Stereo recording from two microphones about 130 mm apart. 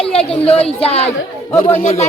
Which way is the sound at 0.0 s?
50° left (ahead or behind).